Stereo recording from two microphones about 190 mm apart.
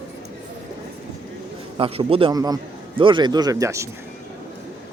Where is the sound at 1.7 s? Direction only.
30° right (ahead or behind).